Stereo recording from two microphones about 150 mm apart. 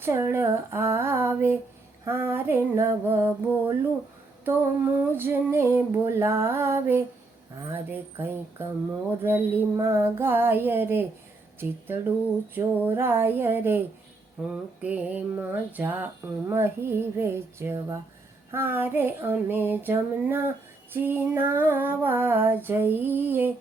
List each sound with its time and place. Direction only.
0.0 s female singing: 15° right (ahead or behind)
5.1 s female singing: 15° right (ahead or behind)